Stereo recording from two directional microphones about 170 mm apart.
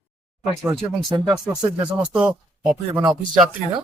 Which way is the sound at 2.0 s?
5° right (ahead or behind).